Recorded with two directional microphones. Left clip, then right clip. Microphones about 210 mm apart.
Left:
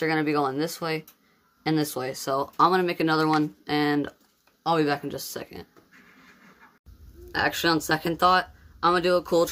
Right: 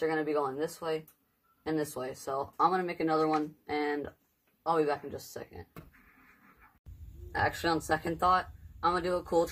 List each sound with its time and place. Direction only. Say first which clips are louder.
0.0 s speech: left 6 dB; 55° left (ahead or behind)
7.3 s speech: left 6 dB; 55° left (ahead or behind)